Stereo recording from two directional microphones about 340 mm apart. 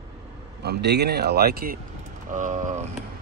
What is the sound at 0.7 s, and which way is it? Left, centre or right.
A man's voice, right.